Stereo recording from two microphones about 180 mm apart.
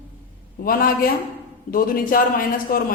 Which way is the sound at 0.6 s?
55° left (ahead or behind).